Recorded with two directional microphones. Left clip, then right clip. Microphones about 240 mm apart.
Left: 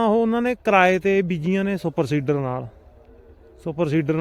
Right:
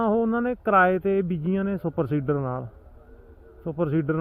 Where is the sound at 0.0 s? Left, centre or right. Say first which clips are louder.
Left 4 dB; centre.